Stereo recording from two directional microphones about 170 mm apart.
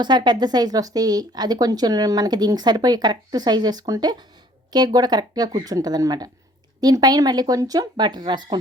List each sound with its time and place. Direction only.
0.0 s speech: 25° right (ahead or behind)